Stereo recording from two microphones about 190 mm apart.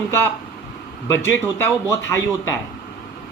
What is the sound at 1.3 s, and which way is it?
Speech, 15° left (ahead or behind).